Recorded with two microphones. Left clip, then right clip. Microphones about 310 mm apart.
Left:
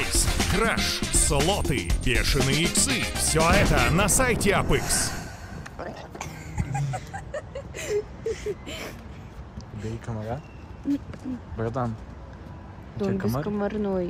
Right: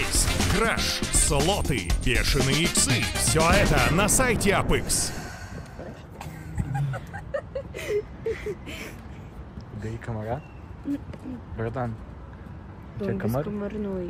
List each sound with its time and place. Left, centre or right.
0.0 s music: centre
6.7 s a sound: centre
8.3 s vehicle: centre
8.6 s vehicle: left
9.8 s speech: centre
11.5 s speech: centre
13.0 s music: centre
13.6 s speech: left